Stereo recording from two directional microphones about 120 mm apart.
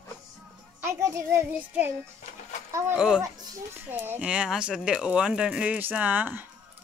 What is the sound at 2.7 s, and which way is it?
Speech, 25° right (ahead or behind).